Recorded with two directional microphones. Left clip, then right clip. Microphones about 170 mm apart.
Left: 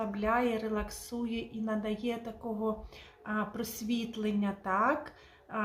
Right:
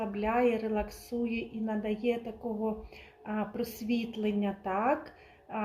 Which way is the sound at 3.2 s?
15° left (ahead or behind).